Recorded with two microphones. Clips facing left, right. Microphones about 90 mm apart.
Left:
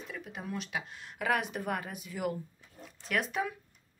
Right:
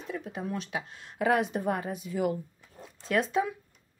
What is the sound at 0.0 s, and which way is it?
Speech, 30° right (ahead or behind).